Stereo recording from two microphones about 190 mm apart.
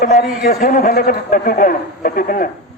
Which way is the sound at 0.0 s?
50° left (ahead or behind).